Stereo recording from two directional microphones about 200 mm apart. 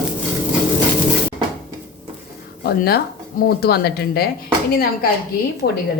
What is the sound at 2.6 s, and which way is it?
Speech, 50° left (ahead or behind).